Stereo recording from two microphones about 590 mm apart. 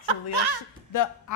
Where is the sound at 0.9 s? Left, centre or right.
Left.